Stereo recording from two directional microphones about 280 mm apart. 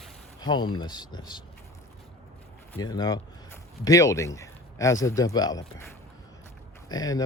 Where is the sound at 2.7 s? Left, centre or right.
Centre.